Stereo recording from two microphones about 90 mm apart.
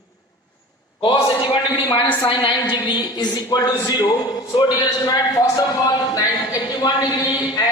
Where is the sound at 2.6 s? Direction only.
55° left (ahead or behind).